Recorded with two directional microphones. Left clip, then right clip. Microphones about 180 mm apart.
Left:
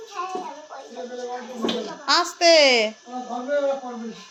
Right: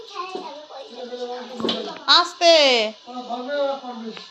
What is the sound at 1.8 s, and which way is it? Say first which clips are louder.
A child's voice: right 5 dB; 25° left (ahead or behind).